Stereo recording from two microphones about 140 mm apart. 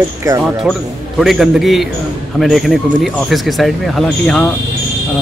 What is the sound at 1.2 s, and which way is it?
Speech, centre (ahead or behind).